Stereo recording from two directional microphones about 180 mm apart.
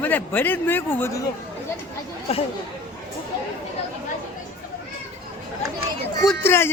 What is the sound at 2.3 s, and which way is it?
Speech, 35° left (ahead or behind).